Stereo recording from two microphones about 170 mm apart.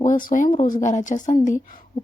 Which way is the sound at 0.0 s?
50° left (ahead or behind).